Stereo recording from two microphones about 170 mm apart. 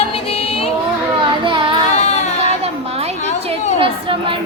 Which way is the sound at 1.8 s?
40° left (ahead or behind).